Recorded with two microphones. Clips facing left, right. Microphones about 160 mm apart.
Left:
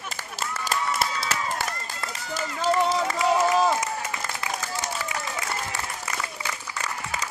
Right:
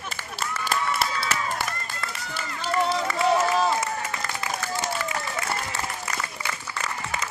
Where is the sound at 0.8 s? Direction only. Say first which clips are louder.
Even; 20° left (ahead or behind).